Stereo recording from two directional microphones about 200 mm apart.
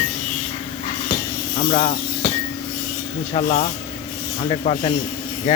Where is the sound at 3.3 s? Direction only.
30° left (ahead or behind).